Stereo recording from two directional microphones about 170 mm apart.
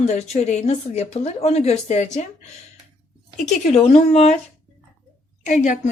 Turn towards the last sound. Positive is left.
turn(degrees=50)  # may be behind; listen again after turning